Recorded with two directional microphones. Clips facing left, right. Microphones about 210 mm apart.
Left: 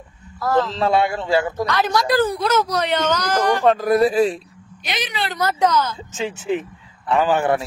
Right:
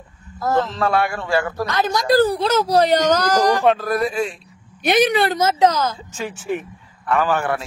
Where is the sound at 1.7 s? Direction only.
20° right (ahead or behind).